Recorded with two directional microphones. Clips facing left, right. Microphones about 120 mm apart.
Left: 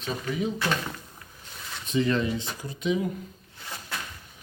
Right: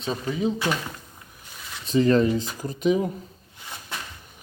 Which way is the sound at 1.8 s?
35° right (ahead or behind).